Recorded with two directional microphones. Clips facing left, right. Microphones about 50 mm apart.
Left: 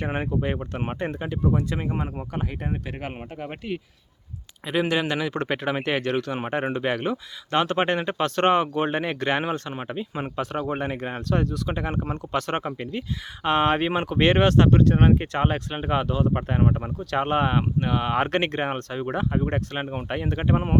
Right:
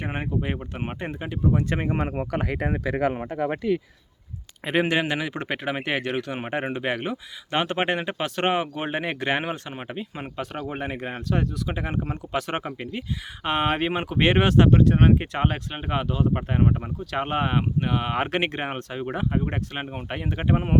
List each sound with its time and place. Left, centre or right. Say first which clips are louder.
0.0 s speech: left 2 dB; centre
1.7 s speech: right 3 dB; right
2.3 s speech: right 4 dB; right
4.6 s speech: right 1 dB; right; by 10.1 s centre
10.2 s speech: left 6 dB; centre